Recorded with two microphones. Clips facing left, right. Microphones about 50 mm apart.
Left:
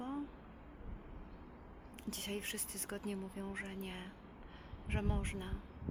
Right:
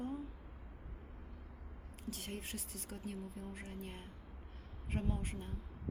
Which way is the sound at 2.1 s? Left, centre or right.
Left.